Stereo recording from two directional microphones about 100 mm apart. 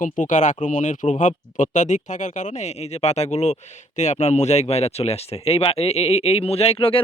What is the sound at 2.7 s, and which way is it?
Speech, 90° left.